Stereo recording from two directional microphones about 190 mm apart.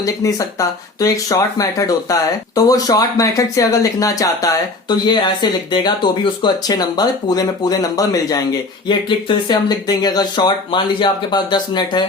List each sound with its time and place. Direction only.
0.0 s speech: 20° left (ahead or behind)